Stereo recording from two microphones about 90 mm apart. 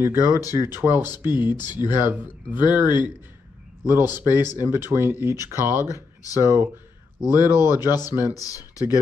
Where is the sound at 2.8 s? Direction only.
55° left (ahead or behind).